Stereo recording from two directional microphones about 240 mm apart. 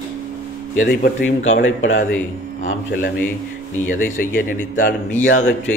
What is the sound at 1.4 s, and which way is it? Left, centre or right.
A man's voice, left.